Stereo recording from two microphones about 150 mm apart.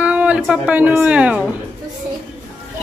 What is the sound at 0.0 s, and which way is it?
Speech, 10° right (ahead or behind).